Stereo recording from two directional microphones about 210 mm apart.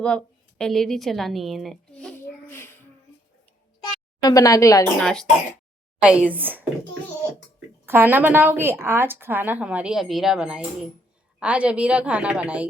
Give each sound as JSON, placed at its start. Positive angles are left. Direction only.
{"t": 0.6, "sound": "a child's voice", "side_deg": 0}
{"t": 4.2, "sound": "a woman's voice", "side_deg": 20}
{"t": 4.9, "sound": "a woman's voice", "side_deg": 5}
{"t": 7.9, "sound": "a woman's voice", "side_deg": -10}